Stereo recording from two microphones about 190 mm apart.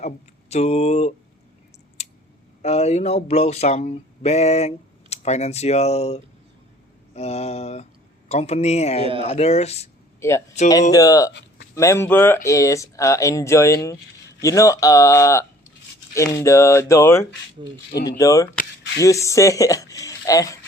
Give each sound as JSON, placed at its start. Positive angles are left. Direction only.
{"t": 0.5, "sound": "speech", "side_deg": 35}
{"t": 2.0, "sound": "clicking", "side_deg": 35}
{"t": 2.6, "sound": "speech", "side_deg": 35}
{"t": 10.2, "sound": "speech", "side_deg": 15}
{"t": 17.9, "sound": "speech", "side_deg": 60}
{"t": 18.2, "sound": "speech", "side_deg": 15}